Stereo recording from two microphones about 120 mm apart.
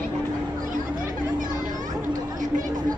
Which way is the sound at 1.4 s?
90° right.